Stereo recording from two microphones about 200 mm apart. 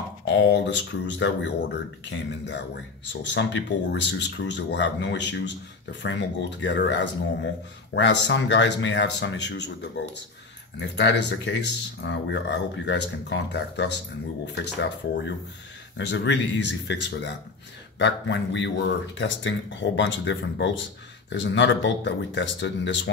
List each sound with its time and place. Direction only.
0.2 s speech: 60° left (ahead or behind)